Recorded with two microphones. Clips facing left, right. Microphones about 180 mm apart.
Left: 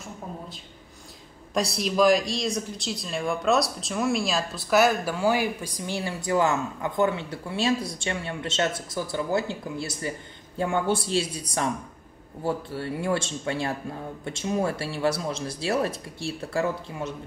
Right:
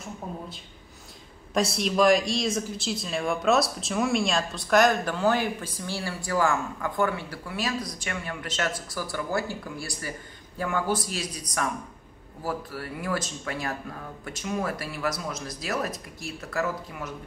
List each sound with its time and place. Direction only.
1.5 s speech: centre (ahead or behind); by 17.1 s 25° left (ahead or behind)